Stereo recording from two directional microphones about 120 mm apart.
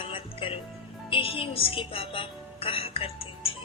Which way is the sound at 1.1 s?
50° left (ahead or behind).